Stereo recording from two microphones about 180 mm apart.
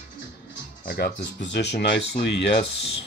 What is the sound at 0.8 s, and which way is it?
Speech, 65° left (ahead or behind).